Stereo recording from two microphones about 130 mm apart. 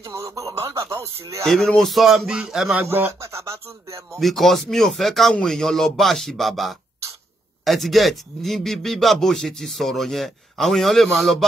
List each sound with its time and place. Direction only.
0.1 s speech: 25° right (ahead or behind)
1.4 s speech: 5° left (ahead or behind)
2.9 s speech: 20° right (ahead or behind)
4.2 s speech: centre (ahead or behind)